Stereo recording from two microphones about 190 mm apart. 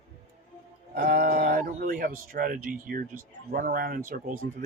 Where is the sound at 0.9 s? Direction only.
50° right (ahead or behind).